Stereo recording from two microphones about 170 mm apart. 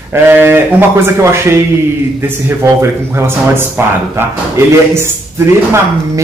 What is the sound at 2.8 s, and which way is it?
Speech, 15° right (ahead or behind).